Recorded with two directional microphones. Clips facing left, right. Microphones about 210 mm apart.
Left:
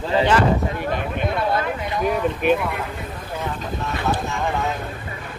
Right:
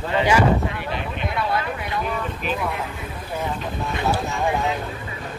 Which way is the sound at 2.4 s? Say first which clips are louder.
Left 10 dB; 60° left (ahead or behind).